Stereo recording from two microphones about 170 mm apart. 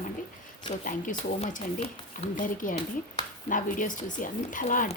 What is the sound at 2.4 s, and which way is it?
Speech, 50° left (ahead or behind).